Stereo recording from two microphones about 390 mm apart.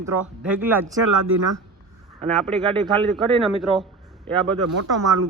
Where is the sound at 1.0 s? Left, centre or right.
Right.